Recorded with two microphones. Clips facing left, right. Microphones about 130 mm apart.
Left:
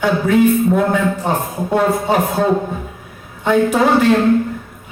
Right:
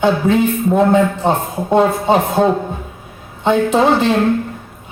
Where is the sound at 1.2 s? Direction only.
25° right (ahead or behind).